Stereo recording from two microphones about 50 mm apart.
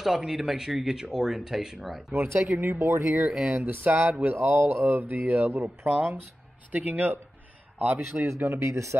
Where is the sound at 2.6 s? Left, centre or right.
Right.